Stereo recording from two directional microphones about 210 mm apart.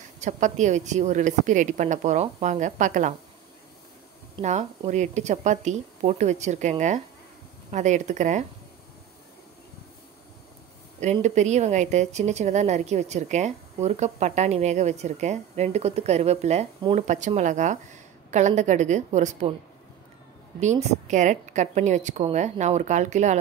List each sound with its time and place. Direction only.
0.2 s speech: 35° right (ahead or behind)
4.4 s speech: 30° right (ahead or behind)
11.0 s speech: 35° right (ahead or behind)
20.6 s speech: 35° right (ahead or behind)